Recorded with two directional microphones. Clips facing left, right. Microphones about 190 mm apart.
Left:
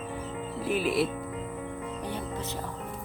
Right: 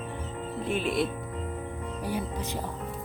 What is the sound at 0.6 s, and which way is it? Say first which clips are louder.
Speech: left 1 dB; 5° left (ahead or behind).